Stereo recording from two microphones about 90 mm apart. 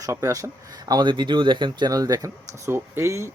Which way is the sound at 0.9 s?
55° right (ahead or behind).